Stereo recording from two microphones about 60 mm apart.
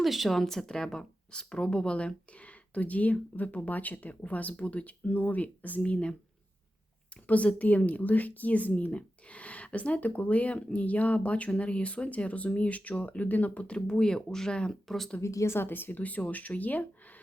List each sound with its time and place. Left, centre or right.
0.0 s a woman's voice: centre
7.3 s a woman's voice: left
14.7 s speech: centre
15.2 s speech: left
15.5 s a woman's voice: left